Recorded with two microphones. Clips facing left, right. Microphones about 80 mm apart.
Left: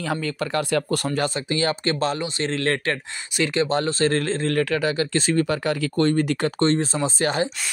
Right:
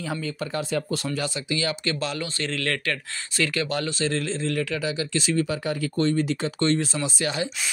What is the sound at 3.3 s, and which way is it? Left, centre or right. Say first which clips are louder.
Speech: left 5 dB; left.